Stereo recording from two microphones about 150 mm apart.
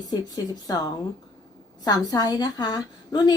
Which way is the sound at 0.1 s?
25° left (ahead or behind).